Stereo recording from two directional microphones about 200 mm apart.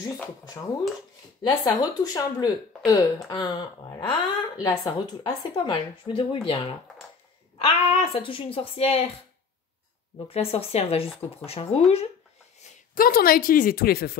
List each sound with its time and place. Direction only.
1.4 s speech: 20° left (ahead or behind)
10.1 s speech: 30° left (ahead or behind)
12.9 s speech: 45° left (ahead or behind)